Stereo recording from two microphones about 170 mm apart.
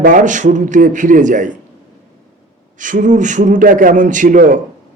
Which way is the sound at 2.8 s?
50° right (ahead or behind).